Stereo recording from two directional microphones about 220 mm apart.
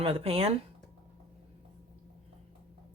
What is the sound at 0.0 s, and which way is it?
Speech, 25° right (ahead or behind).